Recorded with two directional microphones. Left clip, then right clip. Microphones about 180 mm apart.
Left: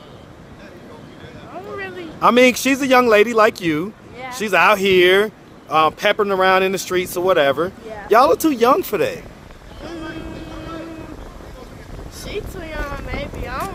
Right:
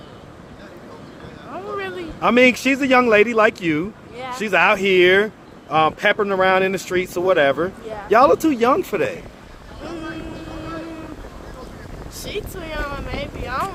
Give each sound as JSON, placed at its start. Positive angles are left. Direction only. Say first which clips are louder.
{"t": 1.7, "sound": "a sound", "louder": "right 2 dB", "side_deg": -15}
{"t": 2.2, "sound": "speech", "louder": "left 2 dB", "side_deg": 30}
{"t": 12.2, "sound": "vehicle", "louder": "even", "side_deg": -15}